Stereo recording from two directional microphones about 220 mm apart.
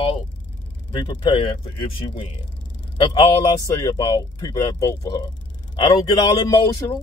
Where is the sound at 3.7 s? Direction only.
15° left (ahead or behind).